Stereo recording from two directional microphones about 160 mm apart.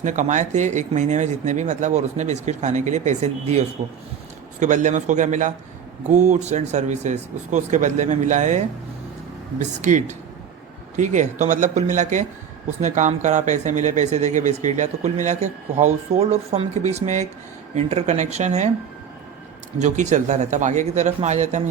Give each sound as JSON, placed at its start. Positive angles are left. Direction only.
{"t": 0.0, "sound": "speech", "side_deg": -50}
{"t": 19.8, "sound": "speech", "side_deg": -50}